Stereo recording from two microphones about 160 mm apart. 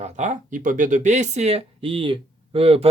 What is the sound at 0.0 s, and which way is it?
Speech, 50° right (ahead or behind).